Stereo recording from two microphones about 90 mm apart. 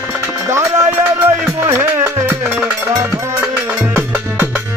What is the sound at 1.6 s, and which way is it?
Music, 25° right (ahead or behind).